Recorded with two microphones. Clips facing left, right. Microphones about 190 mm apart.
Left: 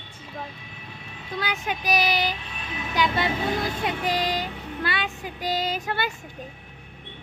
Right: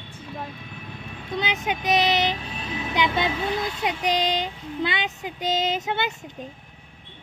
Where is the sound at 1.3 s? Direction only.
20° right (ahead or behind).